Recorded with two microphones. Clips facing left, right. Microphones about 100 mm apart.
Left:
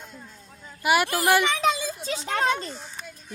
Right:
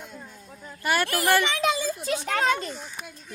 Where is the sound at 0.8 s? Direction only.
10° left (ahead or behind).